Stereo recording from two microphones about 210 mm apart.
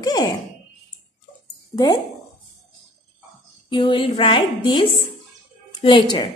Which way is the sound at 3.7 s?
25° left (ahead or behind).